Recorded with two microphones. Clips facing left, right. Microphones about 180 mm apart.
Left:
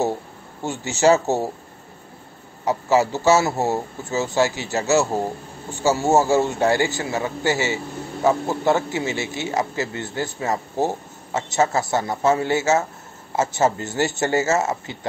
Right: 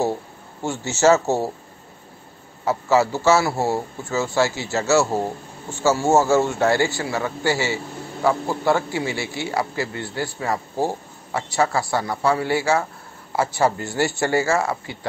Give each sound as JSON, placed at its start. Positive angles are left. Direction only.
{"t": 0.7, "sound": "speech", "side_deg": 15}
{"t": 2.6, "sound": "speech", "side_deg": 15}